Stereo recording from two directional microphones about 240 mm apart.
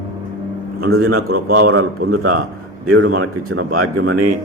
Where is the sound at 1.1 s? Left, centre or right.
Right.